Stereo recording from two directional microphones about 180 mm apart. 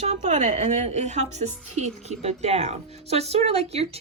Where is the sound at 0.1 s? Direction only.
35° right (ahead or behind).